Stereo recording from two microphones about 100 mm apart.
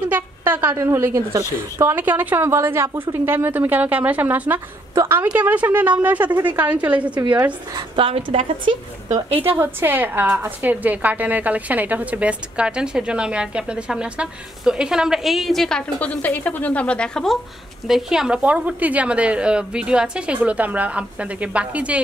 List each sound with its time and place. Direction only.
0.5 s a woman's voice: 20° right (ahead or behind)
7.9 s a woman's voice: 70° right (ahead or behind)
9.5 s a woman's voice: 20° right (ahead or behind); by 15.8 s 5° left (ahead or behind)
16.0 s a woman's voice: 15° left (ahead or behind); by 22.0 s 15° right (ahead or behind)